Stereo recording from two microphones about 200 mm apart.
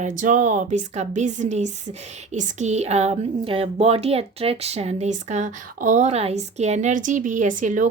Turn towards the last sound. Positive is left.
turn(degrees=-40)  # may be behind; listen again after turning